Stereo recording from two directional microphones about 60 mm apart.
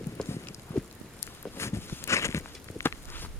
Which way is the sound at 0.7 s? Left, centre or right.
Left.